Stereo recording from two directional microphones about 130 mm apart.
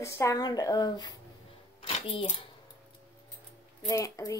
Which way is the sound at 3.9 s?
25° left (ahead or behind).